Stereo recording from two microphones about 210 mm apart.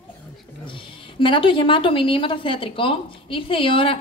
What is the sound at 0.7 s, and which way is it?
A woman's voice, 25° left (ahead or behind).